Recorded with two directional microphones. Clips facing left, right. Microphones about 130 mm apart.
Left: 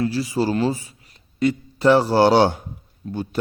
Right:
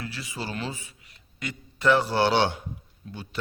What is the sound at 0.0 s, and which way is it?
A man's voice, 35° left (ahead or behind).